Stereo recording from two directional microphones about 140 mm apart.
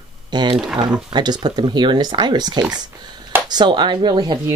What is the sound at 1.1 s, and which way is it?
Speech, 30° right (ahead or behind).